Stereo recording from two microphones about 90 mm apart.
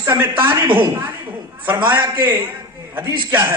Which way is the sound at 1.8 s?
60° right (ahead or behind).